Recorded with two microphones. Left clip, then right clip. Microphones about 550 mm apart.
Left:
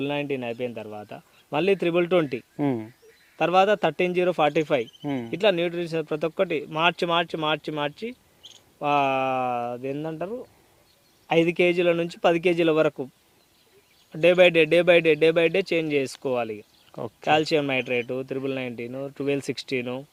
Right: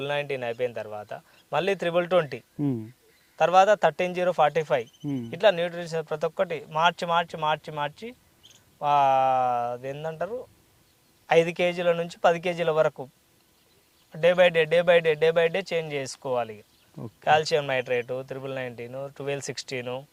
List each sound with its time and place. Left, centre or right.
0.0 s speech: right
14.1 s speech: right